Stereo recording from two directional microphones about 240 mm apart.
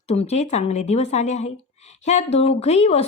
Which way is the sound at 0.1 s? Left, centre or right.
Left.